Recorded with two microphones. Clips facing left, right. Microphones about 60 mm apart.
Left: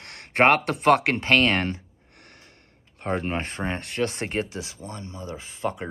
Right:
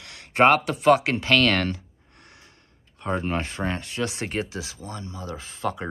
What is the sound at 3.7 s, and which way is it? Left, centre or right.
Speech, left.